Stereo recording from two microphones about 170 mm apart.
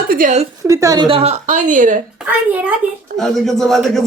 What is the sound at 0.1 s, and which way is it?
Speech, 50° right (ahead or behind).